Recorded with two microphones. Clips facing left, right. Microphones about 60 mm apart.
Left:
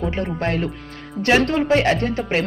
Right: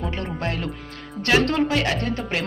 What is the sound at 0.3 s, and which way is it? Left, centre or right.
Speech, left.